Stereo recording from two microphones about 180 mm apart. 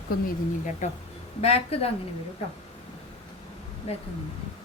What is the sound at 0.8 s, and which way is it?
A woman's voice, 40° left (ahead or behind).